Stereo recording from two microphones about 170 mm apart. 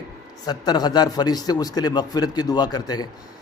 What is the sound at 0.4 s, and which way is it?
A man's voice, 25° left (ahead or behind).